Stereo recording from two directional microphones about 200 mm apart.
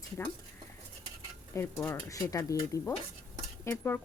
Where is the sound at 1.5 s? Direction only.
10° left (ahead or behind).